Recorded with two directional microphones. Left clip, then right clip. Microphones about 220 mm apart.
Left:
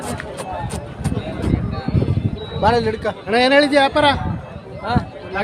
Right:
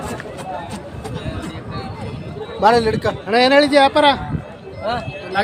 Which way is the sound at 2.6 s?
30° right (ahead or behind).